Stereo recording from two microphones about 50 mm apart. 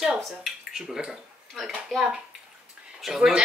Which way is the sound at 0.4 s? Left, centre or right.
Centre.